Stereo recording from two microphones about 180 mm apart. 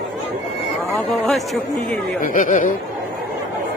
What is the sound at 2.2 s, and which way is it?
Speech, 50° left (ahead or behind).